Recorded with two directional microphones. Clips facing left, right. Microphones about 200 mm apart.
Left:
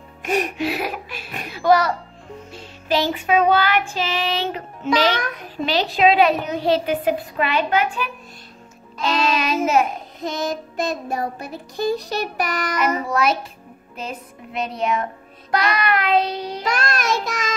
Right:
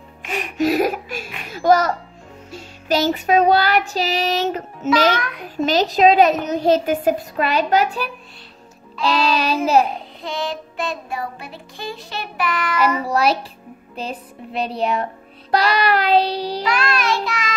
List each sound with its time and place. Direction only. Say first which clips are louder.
0.2 s music: left 6 dB; 40° left (ahead or behind)
0.6 s a child's voice: right 7 dB; 45° right (ahead or behind)
2.5 s music: right 1 dB; 45° right (ahead or behind)
10.2 s child singing: left 2 dB; 45° left (ahead or behind)
13.0 s music: right 2 dB; 35° right (ahead or behind)
16.6 s child singing: even; 45° left (ahead or behind)